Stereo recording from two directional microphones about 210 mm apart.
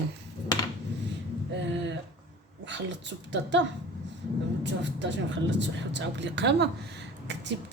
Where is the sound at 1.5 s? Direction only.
60° right (ahead or behind).